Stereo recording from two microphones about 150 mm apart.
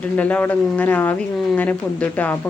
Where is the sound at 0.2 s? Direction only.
10° left (ahead or behind).